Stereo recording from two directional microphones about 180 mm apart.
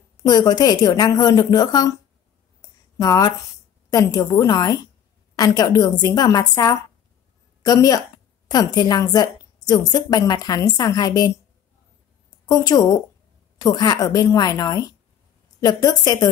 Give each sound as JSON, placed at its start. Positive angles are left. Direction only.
{"t": 0.2, "sound": "a woman's voice", "side_deg": 20}
{"t": 3.0, "sound": "a woman's voice", "side_deg": 20}
{"t": 12.4, "sound": "a woman's voice", "side_deg": 20}